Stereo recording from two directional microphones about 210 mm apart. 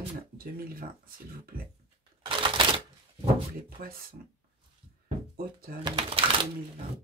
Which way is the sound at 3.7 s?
45° right (ahead or behind).